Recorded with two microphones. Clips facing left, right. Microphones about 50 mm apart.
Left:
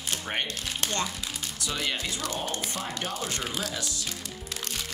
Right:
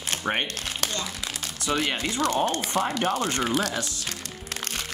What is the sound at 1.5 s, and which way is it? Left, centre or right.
Speech, right.